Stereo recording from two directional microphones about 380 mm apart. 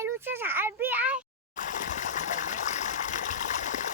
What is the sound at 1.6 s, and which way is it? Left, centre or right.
Water, centre.